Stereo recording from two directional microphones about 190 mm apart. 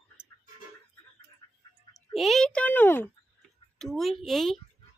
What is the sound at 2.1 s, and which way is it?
Speech, centre (ahead or behind).